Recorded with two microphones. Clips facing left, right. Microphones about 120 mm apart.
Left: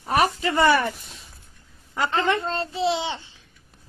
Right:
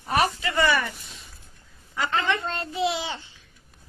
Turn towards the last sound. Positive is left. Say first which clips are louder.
# left 3 dB
turn(degrees=25)  # may be behind; listen again after turning